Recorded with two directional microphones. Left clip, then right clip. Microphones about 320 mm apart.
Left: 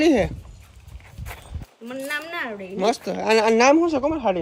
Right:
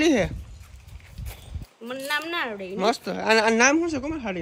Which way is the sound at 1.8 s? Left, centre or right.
Centre.